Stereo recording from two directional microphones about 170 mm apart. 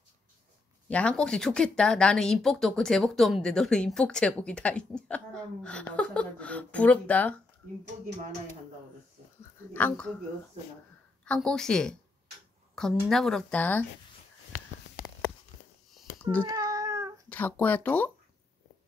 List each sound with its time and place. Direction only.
0.8 s speech: 5° left (ahead or behind)
9.8 s speech: 5° left (ahead or behind)
11.2 s speech: 5° left (ahead or behind)
16.4 s cat: 20° right (ahead or behind)
17.3 s speech: 10° left (ahead or behind)